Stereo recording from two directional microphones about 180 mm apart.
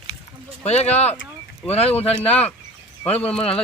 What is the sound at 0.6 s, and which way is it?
Speech, 35° left (ahead or behind).